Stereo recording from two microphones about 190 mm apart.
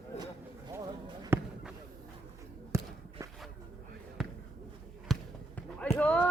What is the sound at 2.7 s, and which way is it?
Walk, 15° right (ahead or behind).